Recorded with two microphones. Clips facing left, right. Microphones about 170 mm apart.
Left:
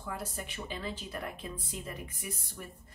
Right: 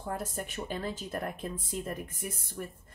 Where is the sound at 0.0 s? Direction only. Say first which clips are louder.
Right 4 dB; 50° right (ahead or behind).